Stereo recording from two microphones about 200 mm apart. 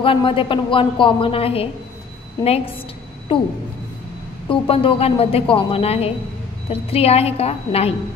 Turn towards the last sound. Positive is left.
turn(degrees=30)  # may be behind; listen again after turning